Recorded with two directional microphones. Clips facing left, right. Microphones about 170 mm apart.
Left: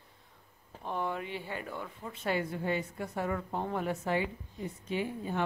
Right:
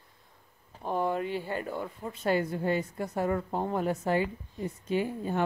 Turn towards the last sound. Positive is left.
turn(degrees=-45)  # may be behind; listen again after turning